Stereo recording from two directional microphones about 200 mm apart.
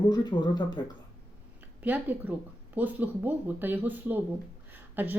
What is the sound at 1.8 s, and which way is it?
Speech, 10° right (ahead or behind).